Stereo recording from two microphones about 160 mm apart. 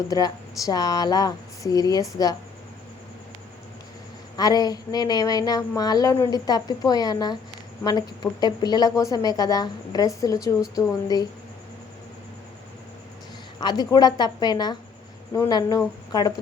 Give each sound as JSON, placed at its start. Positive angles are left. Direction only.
{"t": 0.1, "sound": "speech", "side_deg": 25}
{"t": 4.4, "sound": "speech", "side_deg": 25}
{"t": 13.6, "sound": "speech", "side_deg": 25}